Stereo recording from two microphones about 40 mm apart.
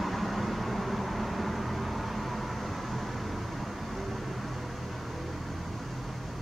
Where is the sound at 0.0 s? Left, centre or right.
Centre.